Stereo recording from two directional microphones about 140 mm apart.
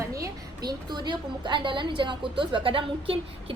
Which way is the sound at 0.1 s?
25° right (ahead or behind).